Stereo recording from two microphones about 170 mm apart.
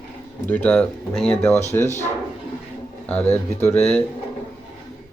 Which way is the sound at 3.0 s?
10° left (ahead or behind).